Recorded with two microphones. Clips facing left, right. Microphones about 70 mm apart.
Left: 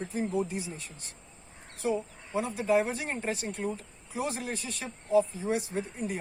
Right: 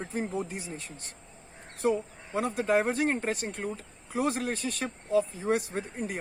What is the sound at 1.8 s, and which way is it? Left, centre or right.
Speech, right.